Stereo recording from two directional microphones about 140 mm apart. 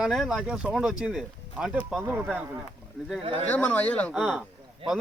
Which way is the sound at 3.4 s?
10° left (ahead or behind).